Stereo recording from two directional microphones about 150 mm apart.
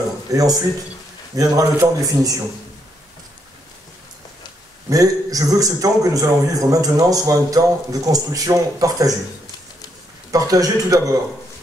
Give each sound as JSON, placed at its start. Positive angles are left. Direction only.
{"t": 0.3, "sound": "a man's voice", "side_deg": -25}
{"t": 4.8, "sound": "a man's voice", "side_deg": -25}
{"t": 10.3, "sound": "a man's voice", "side_deg": -25}